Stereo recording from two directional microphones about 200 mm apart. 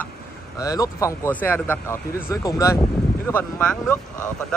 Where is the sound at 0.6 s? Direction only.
15° left (ahead or behind).